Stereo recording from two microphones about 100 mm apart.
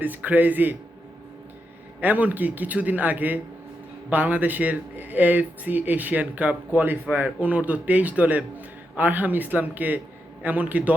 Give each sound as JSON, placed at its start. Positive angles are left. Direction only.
{"t": 0.0, "sound": "speech", "side_deg": -15}
{"t": 2.0, "sound": "speech", "side_deg": -15}